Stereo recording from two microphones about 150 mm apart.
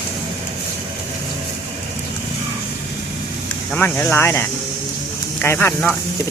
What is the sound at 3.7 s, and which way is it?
Speech, 10° left (ahead or behind).